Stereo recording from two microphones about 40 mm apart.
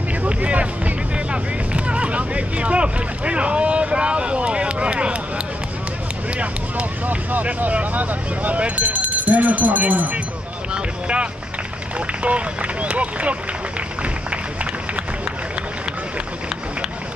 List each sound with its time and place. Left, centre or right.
0.2 s music: right
6.3 s vehicle: right
8.5 s speech: right
10.7 s run: right
12.2 s speech: right
14.0 s music: right